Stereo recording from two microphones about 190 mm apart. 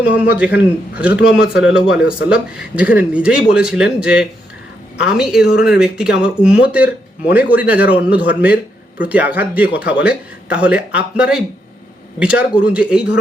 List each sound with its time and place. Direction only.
0.3 s speech: 5° right (ahead or behind)